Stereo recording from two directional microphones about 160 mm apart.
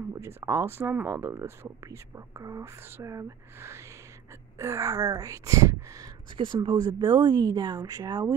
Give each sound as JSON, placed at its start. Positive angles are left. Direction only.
{"t": 0.1, "sound": "speech", "side_deg": -15}